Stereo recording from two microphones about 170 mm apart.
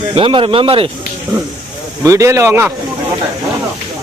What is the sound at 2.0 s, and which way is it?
Speech, 20° right (ahead or behind).